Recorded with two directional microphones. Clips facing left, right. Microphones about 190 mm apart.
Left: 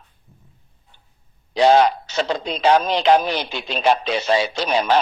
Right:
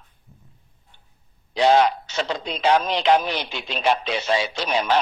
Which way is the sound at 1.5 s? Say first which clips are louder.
Left 3 dB; 35° left (ahead or behind).